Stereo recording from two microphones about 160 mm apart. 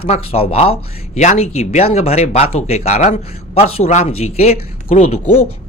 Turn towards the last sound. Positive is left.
turn(degrees=40)  # may be behind; listen again after turning